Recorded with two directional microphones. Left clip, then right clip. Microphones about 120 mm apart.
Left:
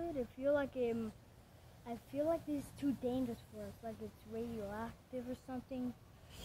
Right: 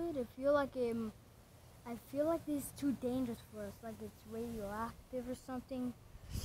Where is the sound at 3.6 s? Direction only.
30° right (ahead or behind).